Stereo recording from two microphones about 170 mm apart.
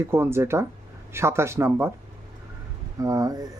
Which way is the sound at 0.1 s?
15° right (ahead or behind).